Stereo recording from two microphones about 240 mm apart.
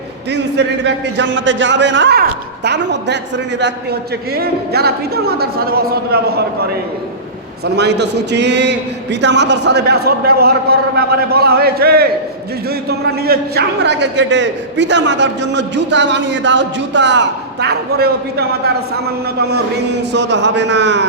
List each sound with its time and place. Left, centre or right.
0.3 s a man's voice: right